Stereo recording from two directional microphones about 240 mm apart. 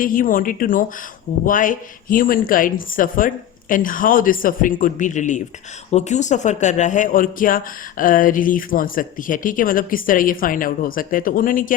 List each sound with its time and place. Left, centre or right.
0.0 s a man's voice: left